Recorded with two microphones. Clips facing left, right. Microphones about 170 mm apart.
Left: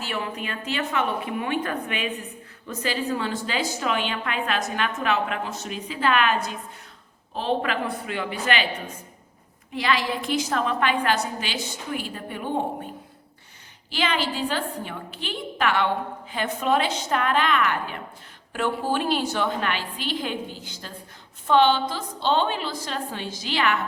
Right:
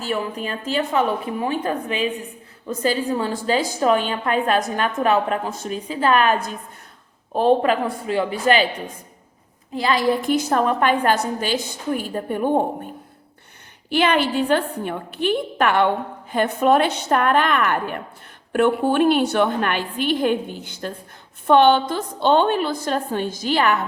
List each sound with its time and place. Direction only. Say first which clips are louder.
0.0 s a woman's voice: right 5 dB; 40° right (ahead or behind)
9.8 s a woman's voice: right 6 dB; 40° right (ahead or behind)
13.9 s a woman's voice: right 7 dB; 55° right (ahead or behind)